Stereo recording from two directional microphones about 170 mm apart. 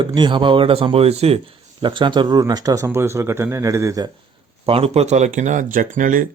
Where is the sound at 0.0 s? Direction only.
30° right (ahead or behind).